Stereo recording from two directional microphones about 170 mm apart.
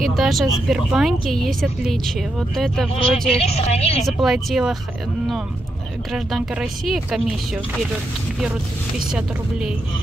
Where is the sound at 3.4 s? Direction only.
40° left (ahead or behind).